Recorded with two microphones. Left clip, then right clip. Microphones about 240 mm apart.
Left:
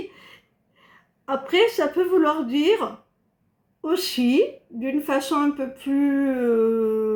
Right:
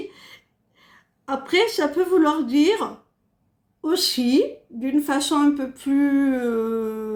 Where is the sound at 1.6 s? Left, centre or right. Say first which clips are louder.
Left 1 dB; right.